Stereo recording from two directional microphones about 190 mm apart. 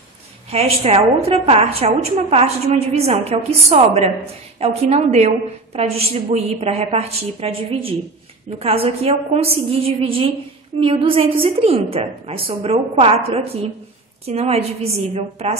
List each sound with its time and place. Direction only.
0.5 s a woman's voice: 30° right (ahead or behind)